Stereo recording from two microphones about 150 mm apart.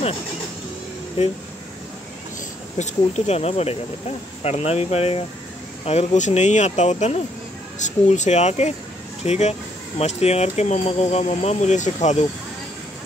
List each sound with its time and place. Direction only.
1.2 s speech: 45° left (ahead or behind)
2.8 s speech: 45° left (ahead or behind)